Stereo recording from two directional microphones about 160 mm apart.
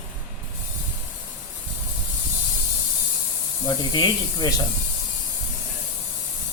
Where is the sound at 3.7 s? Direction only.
25° left (ahead or behind).